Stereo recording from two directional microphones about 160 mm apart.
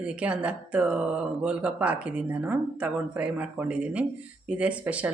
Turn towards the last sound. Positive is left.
turn(degrees=-10)  # may be behind; listen again after turning